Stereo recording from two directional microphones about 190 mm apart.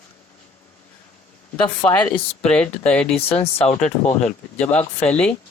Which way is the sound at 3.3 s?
30° left (ahead or behind).